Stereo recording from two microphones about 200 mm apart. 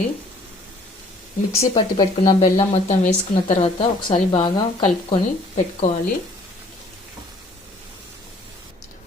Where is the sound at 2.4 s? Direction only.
30° left (ahead or behind).